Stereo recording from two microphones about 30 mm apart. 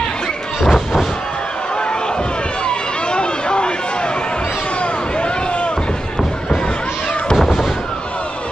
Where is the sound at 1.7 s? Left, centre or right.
Left.